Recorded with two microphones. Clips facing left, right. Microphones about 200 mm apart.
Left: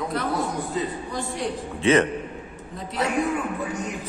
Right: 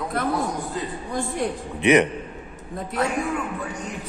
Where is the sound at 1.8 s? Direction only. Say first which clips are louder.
Right 2 dB; 15° right (ahead or behind).